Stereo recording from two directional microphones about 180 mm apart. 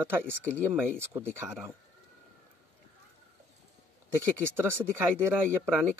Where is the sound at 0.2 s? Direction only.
10° left (ahead or behind).